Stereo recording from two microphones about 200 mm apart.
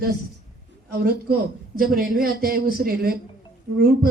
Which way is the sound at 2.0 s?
45° right (ahead or behind).